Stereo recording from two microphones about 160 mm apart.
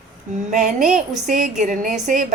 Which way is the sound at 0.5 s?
50° right (ahead or behind).